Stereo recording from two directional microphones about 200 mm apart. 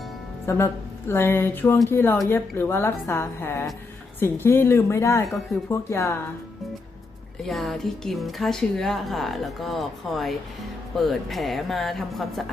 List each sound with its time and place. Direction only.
0.4 s speech: 15° left (ahead or behind)
7.4 s a woman's voice: centre (ahead or behind)